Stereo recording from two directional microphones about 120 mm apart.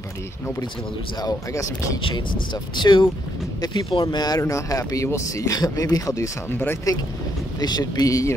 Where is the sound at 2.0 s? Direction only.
40° left (ahead or behind); by 6.9 s 20° left (ahead or behind).